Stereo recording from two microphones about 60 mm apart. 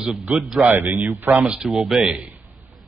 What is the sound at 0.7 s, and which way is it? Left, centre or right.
Speech, right.